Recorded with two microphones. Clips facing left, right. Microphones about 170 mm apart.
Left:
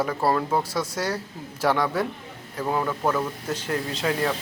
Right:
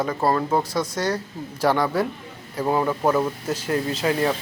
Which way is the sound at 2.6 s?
20° right (ahead or behind).